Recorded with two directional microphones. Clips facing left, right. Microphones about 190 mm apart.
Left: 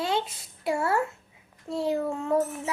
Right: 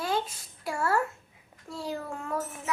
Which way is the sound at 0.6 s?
20° left (ahead or behind).